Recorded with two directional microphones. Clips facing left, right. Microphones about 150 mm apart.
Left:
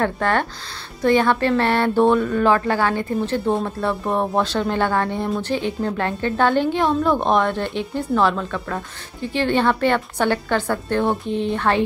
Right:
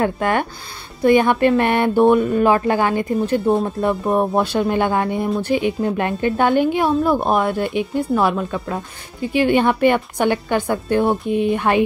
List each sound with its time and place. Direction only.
0.0 s speech: 15° right (ahead or behind)